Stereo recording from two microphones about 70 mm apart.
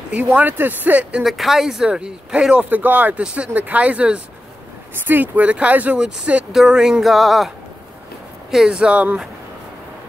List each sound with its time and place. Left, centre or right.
0.1 s speech: right
1.2 s speech: centre
2.7 s speech: right